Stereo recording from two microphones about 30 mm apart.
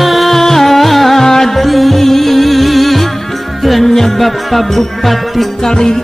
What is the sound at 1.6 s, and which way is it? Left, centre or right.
Music, centre.